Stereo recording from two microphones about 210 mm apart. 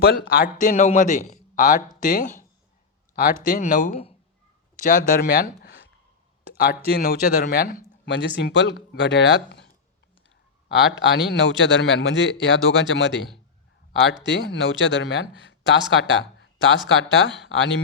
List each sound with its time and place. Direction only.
0.0 s a man's voice: 45° left (ahead or behind)
8.0 s speech: 55° left (ahead or behind)
11.0 s speech: 55° left (ahead or behind)
14.3 s speech: 55° left (ahead or behind)